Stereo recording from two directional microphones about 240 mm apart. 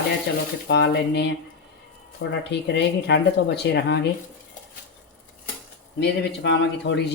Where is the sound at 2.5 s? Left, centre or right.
Left.